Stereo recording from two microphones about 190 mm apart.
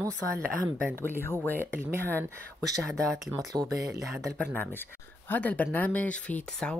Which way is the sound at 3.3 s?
20° right (ahead or behind).